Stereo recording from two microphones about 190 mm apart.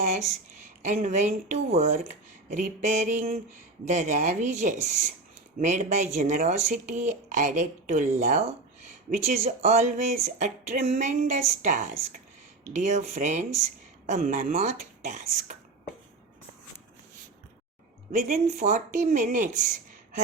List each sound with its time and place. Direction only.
0.8 s speech: 40° right (ahead or behind)
18.1 s speech: 40° right (ahead or behind)